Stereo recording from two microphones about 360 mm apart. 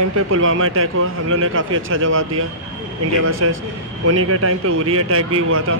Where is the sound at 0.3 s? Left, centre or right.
Right.